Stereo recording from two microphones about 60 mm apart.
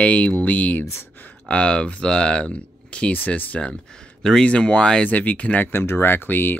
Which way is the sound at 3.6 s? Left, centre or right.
Centre.